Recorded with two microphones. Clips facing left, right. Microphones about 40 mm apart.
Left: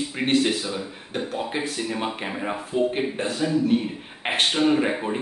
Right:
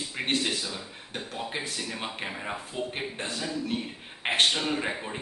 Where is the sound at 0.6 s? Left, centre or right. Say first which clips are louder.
Left 7 dB; left.